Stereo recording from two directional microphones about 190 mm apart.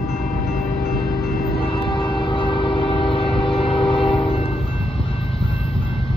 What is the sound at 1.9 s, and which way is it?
Train, 25° left (ahead or behind).